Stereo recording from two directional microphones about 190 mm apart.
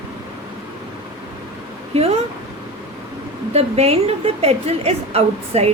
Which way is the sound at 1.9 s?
30° right (ahead or behind).